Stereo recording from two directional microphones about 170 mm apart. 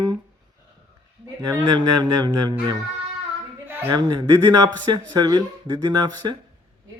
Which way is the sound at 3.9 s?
25° right (ahead or behind).